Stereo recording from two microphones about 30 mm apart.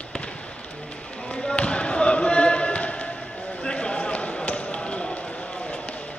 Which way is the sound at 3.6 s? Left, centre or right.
Left.